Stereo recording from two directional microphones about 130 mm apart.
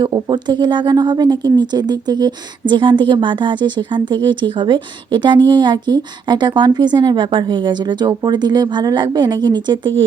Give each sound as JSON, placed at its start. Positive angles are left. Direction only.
{"t": 0.0, "sound": "a woman's voice", "side_deg": -35}